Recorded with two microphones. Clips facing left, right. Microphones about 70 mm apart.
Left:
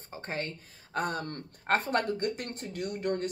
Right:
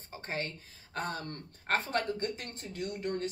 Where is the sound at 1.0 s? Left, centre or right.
Left.